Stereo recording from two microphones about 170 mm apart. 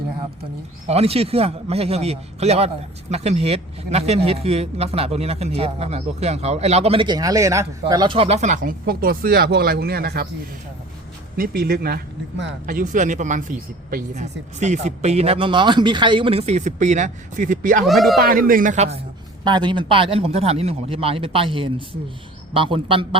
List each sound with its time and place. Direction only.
0.9 s a man's voice: 35° right (ahead or behind); by 10.2 s 65° right (ahead or behind)
11.3 s speech: 60° right (ahead or behind); by 12.5 s 75° right (ahead or behind)
12.6 s speech: 50° right (ahead or behind)
17.8 s speech: centre (ahead or behind)
18.2 s speech: 60° right (ahead or behind); by 18.9 s 45° right (ahead or behind)
19.5 s a man's voice: 25° right (ahead or behind)